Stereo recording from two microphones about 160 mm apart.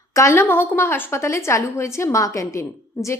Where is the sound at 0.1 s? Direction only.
20° left (ahead or behind).